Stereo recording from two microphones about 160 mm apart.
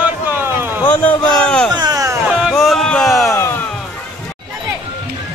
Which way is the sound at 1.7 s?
25° right (ahead or behind).